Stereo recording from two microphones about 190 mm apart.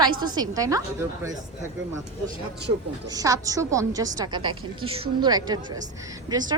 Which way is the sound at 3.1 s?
20° right (ahead or behind).